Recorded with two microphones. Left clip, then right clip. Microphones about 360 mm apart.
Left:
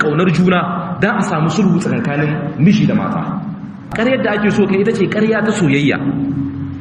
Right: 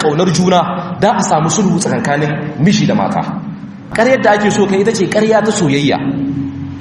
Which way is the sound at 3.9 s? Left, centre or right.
Centre.